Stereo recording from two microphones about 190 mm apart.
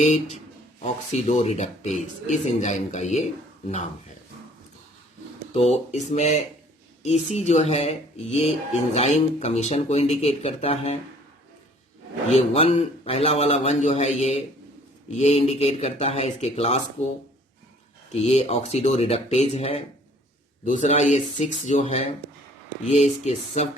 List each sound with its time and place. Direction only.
0.0 s speech: 35° left (ahead or behind)
5.5 s speech: 35° left (ahead or behind)
12.3 s speech: 35° left (ahead or behind)
18.1 s speech: 35° left (ahead or behind)